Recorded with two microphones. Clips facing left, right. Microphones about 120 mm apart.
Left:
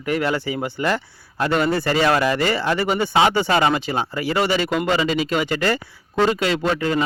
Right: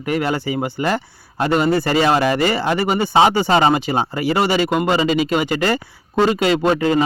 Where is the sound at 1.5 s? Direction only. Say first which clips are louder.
Right 3 dB; 10° right (ahead or behind).